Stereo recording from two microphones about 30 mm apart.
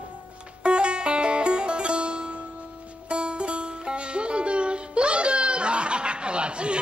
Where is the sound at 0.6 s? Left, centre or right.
Right.